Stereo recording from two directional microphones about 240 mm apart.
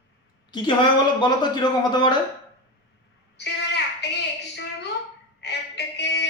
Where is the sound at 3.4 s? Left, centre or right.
Left.